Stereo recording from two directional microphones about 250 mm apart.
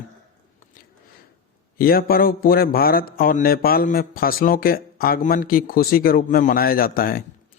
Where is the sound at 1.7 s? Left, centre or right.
Left.